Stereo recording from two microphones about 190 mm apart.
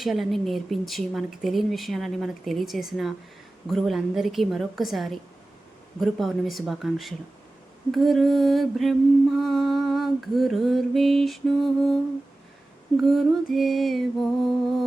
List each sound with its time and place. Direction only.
0.0 s mantra: centre (ahead or behind)
13.0 s mantra: centre (ahead or behind)